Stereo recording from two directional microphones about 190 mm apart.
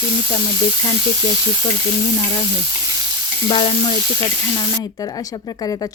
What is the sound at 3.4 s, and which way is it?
A woman's voice, 25° left (ahead or behind).